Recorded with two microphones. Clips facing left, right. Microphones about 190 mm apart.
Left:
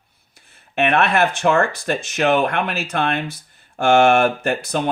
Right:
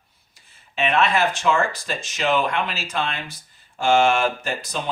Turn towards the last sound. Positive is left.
turn(degrees=60)  # may be behind; listen again after turning